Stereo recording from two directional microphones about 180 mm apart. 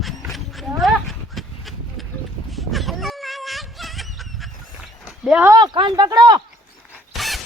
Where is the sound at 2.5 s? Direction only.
Centre (ahead or behind).